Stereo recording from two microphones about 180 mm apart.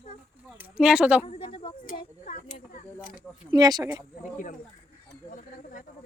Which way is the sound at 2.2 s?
45° left (ahead or behind).